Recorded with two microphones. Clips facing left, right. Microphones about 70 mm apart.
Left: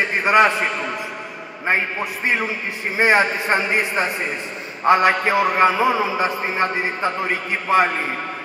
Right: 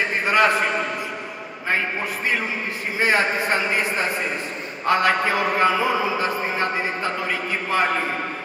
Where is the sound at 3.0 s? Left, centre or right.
Left.